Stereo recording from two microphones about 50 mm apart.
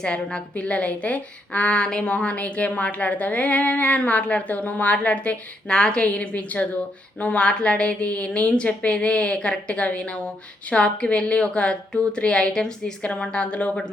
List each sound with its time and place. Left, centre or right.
0.0 s a woman's voice: centre